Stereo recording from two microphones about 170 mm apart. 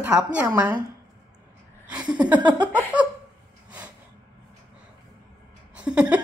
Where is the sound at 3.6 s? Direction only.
10° right (ahead or behind).